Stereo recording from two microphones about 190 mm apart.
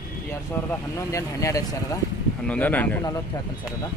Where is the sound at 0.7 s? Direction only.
15° left (ahead or behind).